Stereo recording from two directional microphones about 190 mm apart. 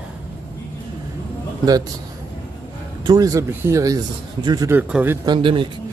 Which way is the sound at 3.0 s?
20° right (ahead or behind).